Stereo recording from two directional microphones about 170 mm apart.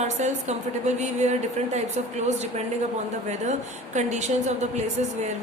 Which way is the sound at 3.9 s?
45° right (ahead or behind).